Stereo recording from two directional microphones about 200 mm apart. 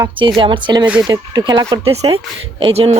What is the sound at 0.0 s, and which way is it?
A child's voice, 25° right (ahead or behind).